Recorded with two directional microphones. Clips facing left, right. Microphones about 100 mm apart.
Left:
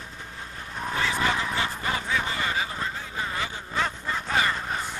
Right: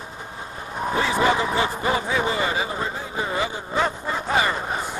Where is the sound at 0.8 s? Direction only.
15° right (ahead or behind).